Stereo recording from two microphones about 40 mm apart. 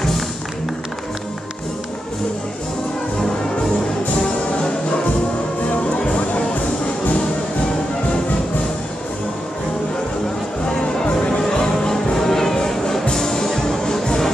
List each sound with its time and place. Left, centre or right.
5.7 s music: left
10.6 s music: left